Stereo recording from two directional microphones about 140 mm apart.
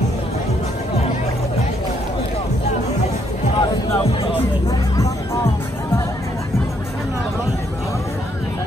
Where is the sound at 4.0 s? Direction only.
35° left (ahead or behind).